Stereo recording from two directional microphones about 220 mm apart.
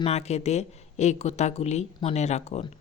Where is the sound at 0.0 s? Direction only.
30° left (ahead or behind).